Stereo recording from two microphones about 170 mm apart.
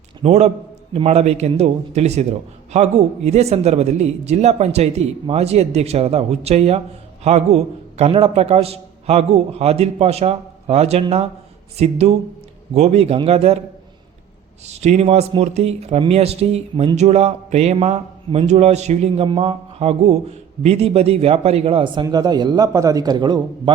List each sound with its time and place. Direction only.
0.2 s speech: 40° right (ahead or behind)
14.7 s a man's voice: 40° right (ahead or behind)